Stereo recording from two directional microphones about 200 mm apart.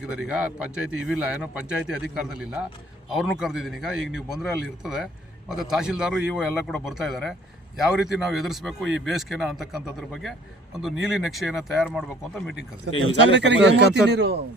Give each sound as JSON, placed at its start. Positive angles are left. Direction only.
{"t": 0.0, "sound": "a man's voice", "side_deg": -5}
{"t": 12.9, "sound": "speech", "side_deg": -60}